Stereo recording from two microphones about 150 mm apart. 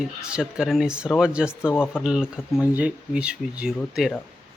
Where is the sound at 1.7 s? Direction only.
10° left (ahead or behind).